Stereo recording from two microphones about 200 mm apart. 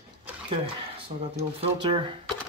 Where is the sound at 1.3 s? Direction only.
30° right (ahead or behind).